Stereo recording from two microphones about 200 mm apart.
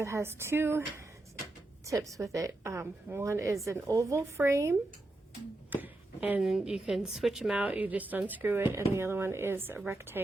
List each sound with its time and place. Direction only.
0.0 s a woman's voice: 15° right (ahead or behind)